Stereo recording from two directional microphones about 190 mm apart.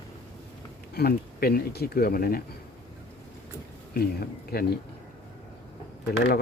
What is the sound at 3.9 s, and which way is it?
Speech, 55° left (ahead or behind).